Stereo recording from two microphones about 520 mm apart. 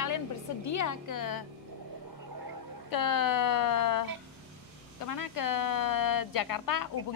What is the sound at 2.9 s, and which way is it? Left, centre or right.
A woman's voice, left.